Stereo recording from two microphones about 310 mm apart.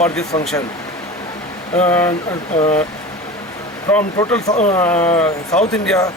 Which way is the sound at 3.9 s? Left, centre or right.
Centre.